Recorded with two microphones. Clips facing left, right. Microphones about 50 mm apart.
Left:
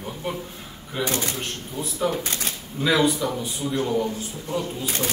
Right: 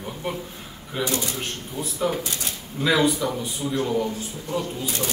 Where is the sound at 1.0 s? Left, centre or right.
Left.